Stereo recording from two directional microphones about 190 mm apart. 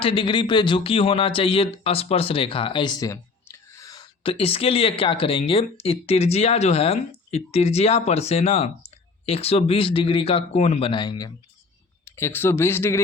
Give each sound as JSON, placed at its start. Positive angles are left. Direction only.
{"t": 0.0, "sound": "speech", "side_deg": 25}
{"t": 12.0, "sound": "speech", "side_deg": 10}